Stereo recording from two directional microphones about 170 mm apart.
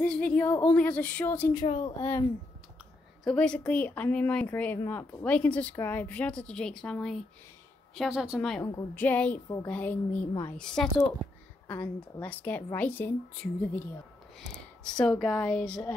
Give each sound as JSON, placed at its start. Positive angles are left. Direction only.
{"t": 0.0, "sound": "speech", "side_deg": 5}
{"t": 1.7, "sound": "speech", "side_deg": 30}
{"t": 3.3, "sound": "a woman's voice", "side_deg": 5}